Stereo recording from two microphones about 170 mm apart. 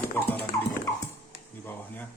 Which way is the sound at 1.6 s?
10° left (ahead or behind).